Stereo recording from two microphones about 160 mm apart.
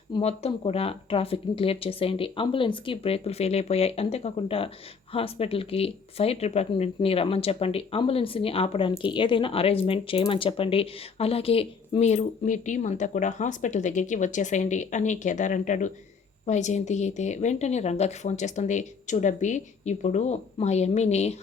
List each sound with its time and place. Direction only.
0.2 s a woman's voice: 40° left (ahead or behind)